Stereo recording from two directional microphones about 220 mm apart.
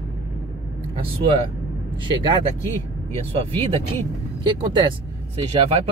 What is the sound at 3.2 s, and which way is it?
Speech, 25° right (ahead or behind).